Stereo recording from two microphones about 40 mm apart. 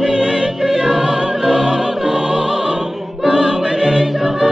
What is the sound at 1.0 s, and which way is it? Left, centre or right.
Music, right.